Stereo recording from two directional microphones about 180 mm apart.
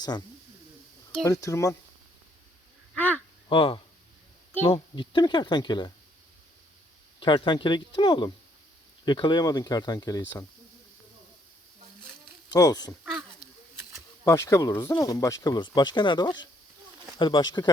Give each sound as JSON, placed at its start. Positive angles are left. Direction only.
{"t": 1.3, "sound": "speech", "side_deg": 20}
{"t": 2.9, "sound": "a sound", "side_deg": 10}
{"t": 3.5, "sound": "speech", "side_deg": 25}
{"t": 4.5, "sound": "speech", "side_deg": 15}
{"t": 7.2, "sound": "speech", "side_deg": 25}
{"t": 12.5, "sound": "speech", "side_deg": 20}
{"t": 14.3, "sound": "speech", "side_deg": 15}